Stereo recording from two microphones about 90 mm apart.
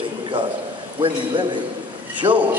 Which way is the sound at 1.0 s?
60° right (ahead or behind).